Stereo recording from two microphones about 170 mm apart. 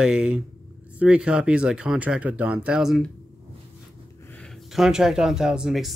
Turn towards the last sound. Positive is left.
turn(degrees=0)  # may be behind; listen again after turning